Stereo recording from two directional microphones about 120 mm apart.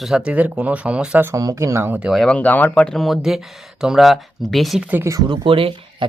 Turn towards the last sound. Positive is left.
turn(degrees=-50)  # may be behind; listen again after turning